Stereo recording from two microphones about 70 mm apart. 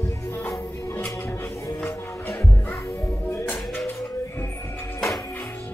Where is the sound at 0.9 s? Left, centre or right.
Left.